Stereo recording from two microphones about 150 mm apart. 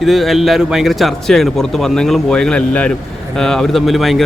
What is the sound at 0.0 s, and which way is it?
A man's voice, centre (ahead or behind).